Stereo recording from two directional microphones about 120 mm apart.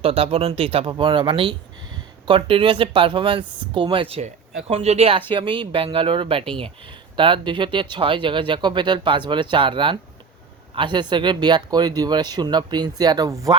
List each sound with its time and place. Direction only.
0.0 s speech: 55° right (ahead or behind)
5.3 s speech: 40° right (ahead or behind); by 13.6 s 25° right (ahead or behind)